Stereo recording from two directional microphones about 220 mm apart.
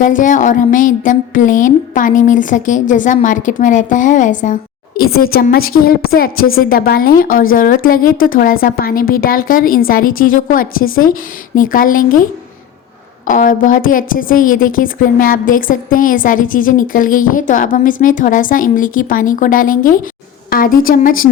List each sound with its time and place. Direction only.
0.0 s a woman's voice: 35° left (ahead or behind)
13.2 s a woman's voice: 40° left (ahead or behind)